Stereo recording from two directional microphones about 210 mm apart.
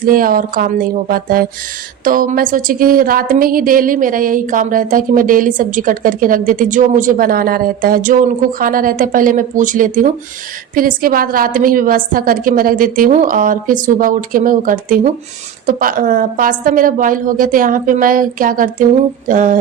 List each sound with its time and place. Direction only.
0.0 s a woman's voice: 40° right (ahead or behind)